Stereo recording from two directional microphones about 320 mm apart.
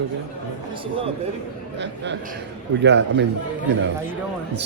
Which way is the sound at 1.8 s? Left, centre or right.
Right.